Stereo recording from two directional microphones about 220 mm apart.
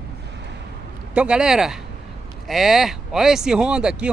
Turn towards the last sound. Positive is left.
turn(degrees=-5)  # may be behind; listen again after turning